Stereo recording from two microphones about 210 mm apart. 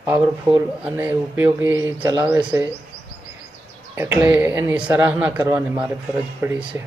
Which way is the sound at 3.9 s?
10° right (ahead or behind).